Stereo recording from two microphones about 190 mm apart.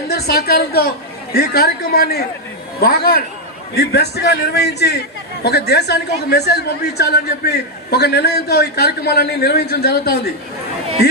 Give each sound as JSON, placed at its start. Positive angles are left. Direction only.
{"t": 0.1, "sound": "a woman's voice", "side_deg": 55}